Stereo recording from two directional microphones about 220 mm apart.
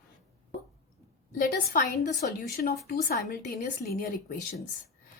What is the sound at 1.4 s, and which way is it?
A woman's voice, 35° left (ahead or behind).